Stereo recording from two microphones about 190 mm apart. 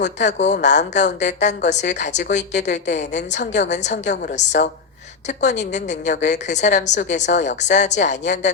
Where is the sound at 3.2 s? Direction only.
65° left (ahead or behind).